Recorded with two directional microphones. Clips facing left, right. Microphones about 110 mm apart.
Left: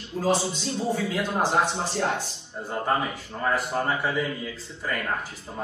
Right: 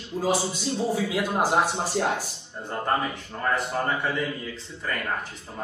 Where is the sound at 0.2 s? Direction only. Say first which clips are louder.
Left 1 dB; 10° right (ahead or behind).